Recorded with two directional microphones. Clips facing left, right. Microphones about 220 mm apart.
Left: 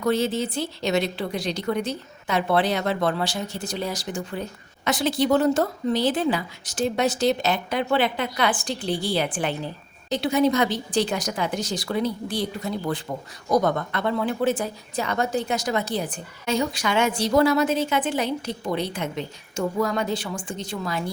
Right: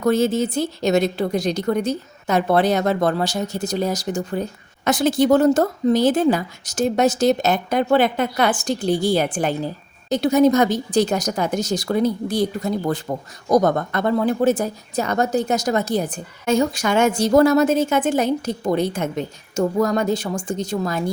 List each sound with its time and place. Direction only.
0.0 s a woman's voice: 45° right (ahead or behind)